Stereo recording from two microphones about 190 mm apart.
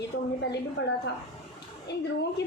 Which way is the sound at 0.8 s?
80° left.